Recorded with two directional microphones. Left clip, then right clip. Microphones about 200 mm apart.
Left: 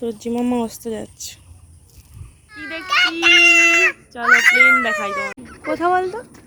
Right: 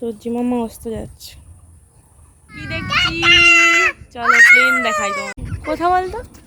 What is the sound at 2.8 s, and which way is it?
Fowl, 50° left (ahead or behind).